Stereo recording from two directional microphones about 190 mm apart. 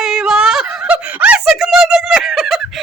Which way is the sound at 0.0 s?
5° right (ahead or behind).